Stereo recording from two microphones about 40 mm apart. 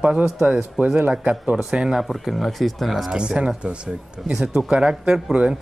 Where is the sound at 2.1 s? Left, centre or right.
Centre.